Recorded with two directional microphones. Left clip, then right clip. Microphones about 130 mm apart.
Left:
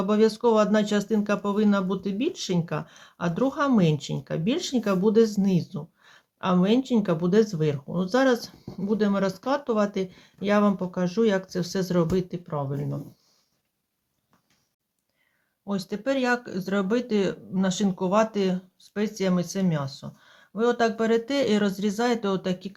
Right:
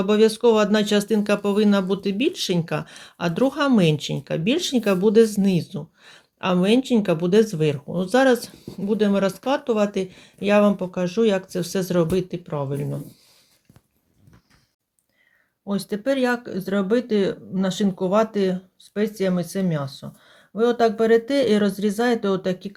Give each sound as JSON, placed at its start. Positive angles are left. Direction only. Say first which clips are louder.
{"t": 0.0, "sound": "speech", "louder": "right 5 dB", "side_deg": -20}
{"t": 12.5, "sound": "speech", "louder": "right 4 dB", "side_deg": -30}
{"t": 15.6, "sound": "speech", "louder": "right 4 dB", "side_deg": -35}